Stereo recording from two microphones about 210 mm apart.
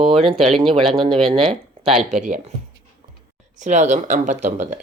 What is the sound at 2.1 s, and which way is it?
Speech, 35° right (ahead or behind).